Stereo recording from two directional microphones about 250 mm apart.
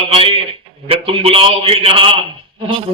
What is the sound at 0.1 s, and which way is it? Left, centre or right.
A man's voice, right.